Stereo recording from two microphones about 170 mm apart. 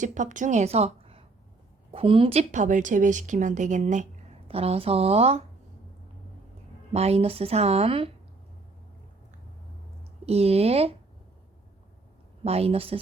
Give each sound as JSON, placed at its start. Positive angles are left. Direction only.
{"t": 0.0, "sound": "a woman's voice", "side_deg": -45}
{"t": 6.9, "sound": "a woman's voice", "side_deg": -40}
{"t": 10.2, "sound": "a woman's voice", "side_deg": -35}
{"t": 12.5, "sound": "a woman's voice", "side_deg": -35}